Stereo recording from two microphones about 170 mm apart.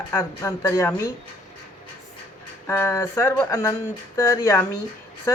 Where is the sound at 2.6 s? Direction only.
15° left (ahead or behind).